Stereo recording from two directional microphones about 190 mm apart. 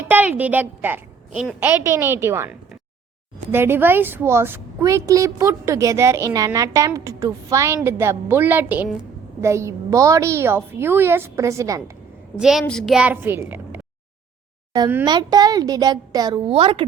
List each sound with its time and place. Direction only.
0.1 s speech: 10° right (ahead or behind)
12.4 s a woman's voice: centre (ahead or behind)
15.0 s a woman's voice: 20° right (ahead or behind)